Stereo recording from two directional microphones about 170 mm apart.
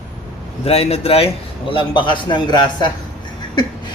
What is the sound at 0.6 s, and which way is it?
A man's voice, 35° left (ahead or behind).